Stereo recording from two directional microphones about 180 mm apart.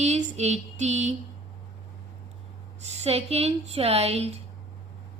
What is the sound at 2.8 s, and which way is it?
Speech, 35° right (ahead or behind).